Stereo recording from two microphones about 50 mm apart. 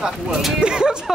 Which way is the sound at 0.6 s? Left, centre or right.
Centre.